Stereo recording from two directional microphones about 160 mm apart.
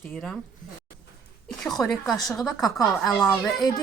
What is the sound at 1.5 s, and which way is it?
A woman's voice, centre (ahead or behind).